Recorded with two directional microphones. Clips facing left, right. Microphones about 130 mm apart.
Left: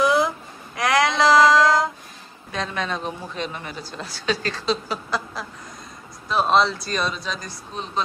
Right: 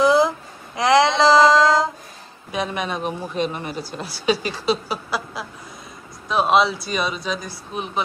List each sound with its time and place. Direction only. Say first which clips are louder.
0.0 s babbling: right 3 dB; 30° right (ahead or behind)
0.7 s child singing: right 4 dB; 25° right (ahead or behind)
2.5 s a woman's voice: right 2 dB; 15° right (ahead or behind)